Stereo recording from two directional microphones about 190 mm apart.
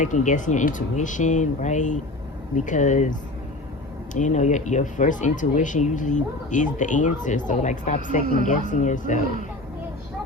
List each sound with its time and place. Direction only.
0.0 s speech: 40° left (ahead or behind)